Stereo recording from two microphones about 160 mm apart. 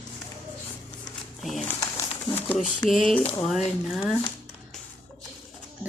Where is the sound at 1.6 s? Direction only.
15° left (ahead or behind).